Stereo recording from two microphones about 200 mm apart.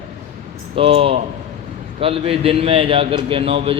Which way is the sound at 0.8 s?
30° right (ahead or behind).